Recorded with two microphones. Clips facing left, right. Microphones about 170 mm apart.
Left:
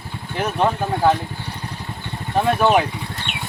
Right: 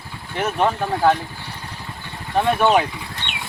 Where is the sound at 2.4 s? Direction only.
5° left (ahead or behind).